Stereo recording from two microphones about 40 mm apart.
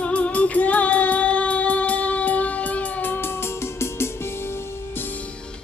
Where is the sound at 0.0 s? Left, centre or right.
Left.